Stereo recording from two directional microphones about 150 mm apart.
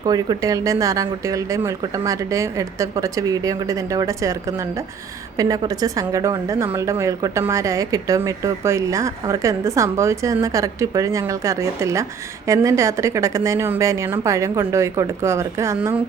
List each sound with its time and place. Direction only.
0.0 s speech: 25° right (ahead or behind)